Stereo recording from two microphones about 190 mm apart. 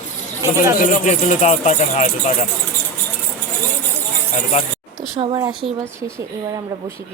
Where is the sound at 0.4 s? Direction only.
15° right (ahead or behind).